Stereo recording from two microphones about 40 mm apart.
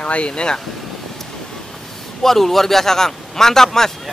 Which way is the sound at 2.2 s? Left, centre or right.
Centre.